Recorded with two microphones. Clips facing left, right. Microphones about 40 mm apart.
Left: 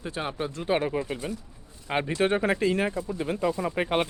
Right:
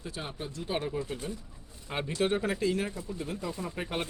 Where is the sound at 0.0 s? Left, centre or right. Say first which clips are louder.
Left 8 dB; left.